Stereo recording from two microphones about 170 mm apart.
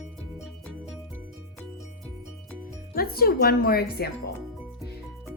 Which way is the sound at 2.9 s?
60° left (ahead or behind).